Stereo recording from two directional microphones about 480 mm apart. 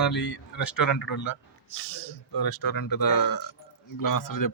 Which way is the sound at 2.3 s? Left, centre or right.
Left.